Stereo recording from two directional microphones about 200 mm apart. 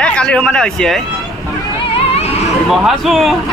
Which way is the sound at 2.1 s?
30° left (ahead or behind).